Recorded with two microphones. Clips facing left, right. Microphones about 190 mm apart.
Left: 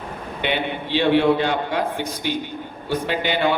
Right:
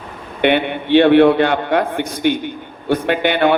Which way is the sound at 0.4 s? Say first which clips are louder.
Right 9 dB; 60° right (ahead or behind).